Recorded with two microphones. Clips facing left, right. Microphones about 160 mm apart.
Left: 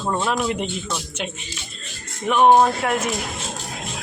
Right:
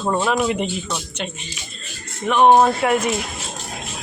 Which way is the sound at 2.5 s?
5° right (ahead or behind).